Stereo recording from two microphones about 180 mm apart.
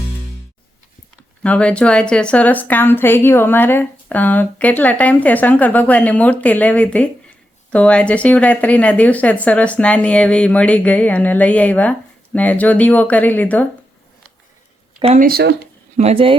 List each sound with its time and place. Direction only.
1.5 s speech: 5° left (ahead or behind)
14.9 s speech: 30° right (ahead or behind)
15.2 s speech: 60° right (ahead or behind)
16.0 s speech: 35° right (ahead or behind)